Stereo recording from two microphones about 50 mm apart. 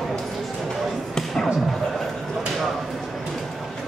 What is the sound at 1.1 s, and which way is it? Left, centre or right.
Music, centre.